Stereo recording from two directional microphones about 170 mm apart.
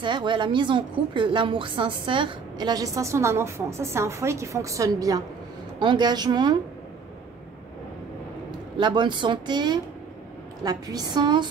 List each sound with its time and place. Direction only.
0.0 s a woman's voice: 30° right (ahead or behind)
8.5 s a woman's voice: 25° right (ahead or behind)